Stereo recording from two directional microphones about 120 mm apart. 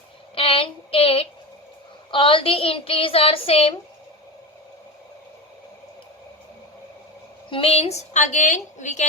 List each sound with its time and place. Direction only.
0.3 s a sound: 50° left (ahead or behind)
2.0 s a woman's voice: 45° left (ahead or behind)
7.5 s a woman's voice: 55° left (ahead or behind); by 9.0 s 85° left